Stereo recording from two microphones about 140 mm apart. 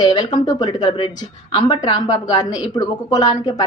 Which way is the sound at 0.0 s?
30° left (ahead or behind).